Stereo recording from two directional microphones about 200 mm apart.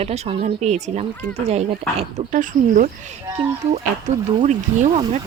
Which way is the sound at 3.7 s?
30° right (ahead or behind).